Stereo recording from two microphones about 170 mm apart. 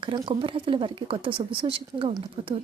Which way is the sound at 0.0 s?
30° right (ahead or behind).